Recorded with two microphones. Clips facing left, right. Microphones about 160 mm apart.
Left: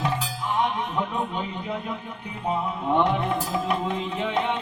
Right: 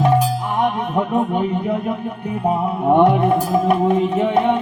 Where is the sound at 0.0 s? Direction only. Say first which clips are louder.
Right 11 dB; 50° right (ahead or behind).